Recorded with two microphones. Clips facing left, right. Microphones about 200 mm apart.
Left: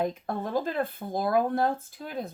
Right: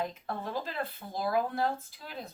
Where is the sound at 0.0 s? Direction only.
50° left (ahead or behind).